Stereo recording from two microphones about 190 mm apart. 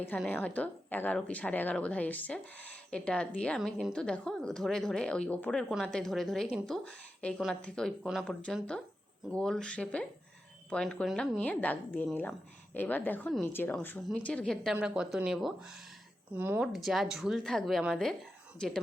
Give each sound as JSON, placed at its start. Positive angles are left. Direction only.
{"t": 0.1, "sound": "a woman's voice", "side_deg": 10}
{"t": 16.7, "sound": "a woman's voice", "side_deg": 0}